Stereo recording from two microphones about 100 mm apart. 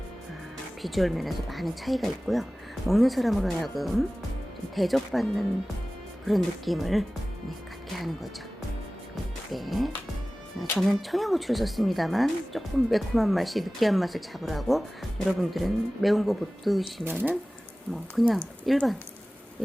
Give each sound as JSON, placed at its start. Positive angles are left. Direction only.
{"t": 0.8, "sound": "speech", "side_deg": 0}
{"t": 9.5, "sound": "speech", "side_deg": 0}
{"t": 17.0, "sound": "speech", "side_deg": -20}
{"t": 17.9, "sound": "speech", "side_deg": 0}